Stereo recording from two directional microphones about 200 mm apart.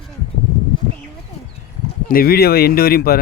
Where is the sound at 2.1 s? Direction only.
50° left (ahead or behind).